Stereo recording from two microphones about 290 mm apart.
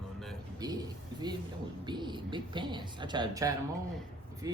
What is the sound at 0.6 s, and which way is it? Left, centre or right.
Speech, centre.